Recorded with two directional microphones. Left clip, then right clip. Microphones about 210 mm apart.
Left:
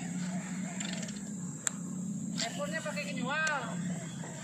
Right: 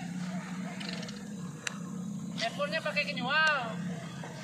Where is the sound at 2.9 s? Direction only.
60° right (ahead or behind).